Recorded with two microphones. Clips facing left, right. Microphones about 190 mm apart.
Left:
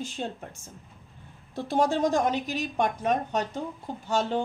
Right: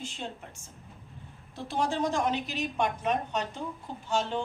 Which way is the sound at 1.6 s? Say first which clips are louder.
Left 5 dB; 45° left (ahead or behind).